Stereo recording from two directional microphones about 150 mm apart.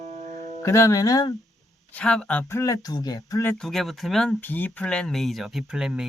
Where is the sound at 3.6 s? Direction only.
Centre (ahead or behind).